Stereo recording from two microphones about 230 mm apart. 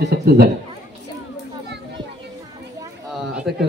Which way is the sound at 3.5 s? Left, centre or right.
Right.